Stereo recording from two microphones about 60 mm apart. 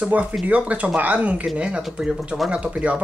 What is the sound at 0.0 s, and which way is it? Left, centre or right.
Speech, right.